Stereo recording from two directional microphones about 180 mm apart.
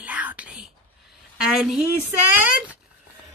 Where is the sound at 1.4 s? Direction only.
5° right (ahead or behind).